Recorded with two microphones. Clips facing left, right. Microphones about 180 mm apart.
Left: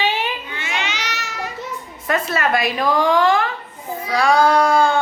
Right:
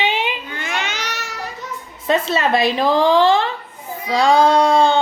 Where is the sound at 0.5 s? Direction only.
45° right (ahead or behind).